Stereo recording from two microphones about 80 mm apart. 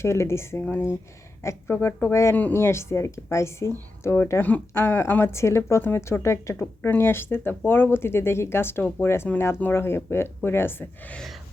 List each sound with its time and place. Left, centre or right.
0.0 s speech: left
2.3 s speech: left
2.6 s speech: left